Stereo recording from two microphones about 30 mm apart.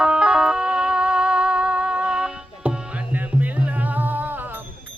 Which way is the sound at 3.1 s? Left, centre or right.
Right.